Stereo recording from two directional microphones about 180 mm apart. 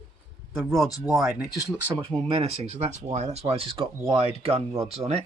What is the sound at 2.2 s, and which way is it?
Speech, 35° right (ahead or behind).